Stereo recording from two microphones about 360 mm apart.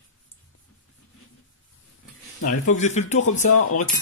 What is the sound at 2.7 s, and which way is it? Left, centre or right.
Speech, centre.